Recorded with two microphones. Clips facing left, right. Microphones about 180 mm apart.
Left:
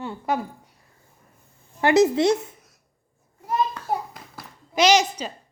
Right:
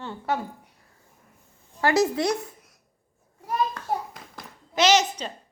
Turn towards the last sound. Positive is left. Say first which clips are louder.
# left 2 dB
turn(degrees=10)  # may be behind; listen again after turning